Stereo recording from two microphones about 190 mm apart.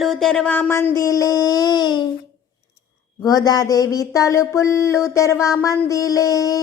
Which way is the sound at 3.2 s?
20° left (ahead or behind).